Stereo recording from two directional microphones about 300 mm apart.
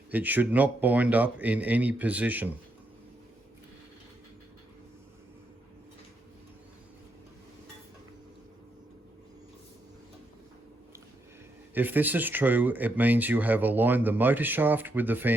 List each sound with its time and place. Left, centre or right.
0.1 s speech: centre
11.7 s speech: centre